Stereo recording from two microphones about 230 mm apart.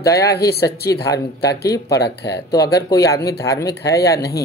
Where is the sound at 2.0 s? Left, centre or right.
Left.